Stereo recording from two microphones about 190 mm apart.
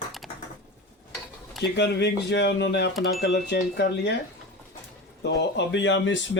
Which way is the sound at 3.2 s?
65° left (ahead or behind).